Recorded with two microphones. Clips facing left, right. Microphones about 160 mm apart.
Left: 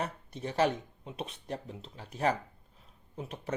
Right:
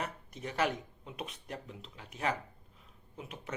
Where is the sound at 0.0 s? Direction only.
30° left (ahead or behind).